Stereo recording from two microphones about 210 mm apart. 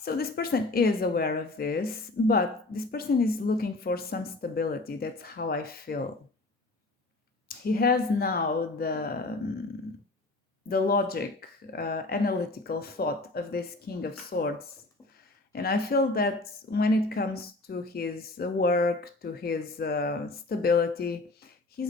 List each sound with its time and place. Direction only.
0.0 s speech: 45° left (ahead or behind)
7.4 s speech: 45° left (ahead or behind)
10.7 s speech: 45° left (ahead or behind)
15.5 s speech: 45° left (ahead or behind)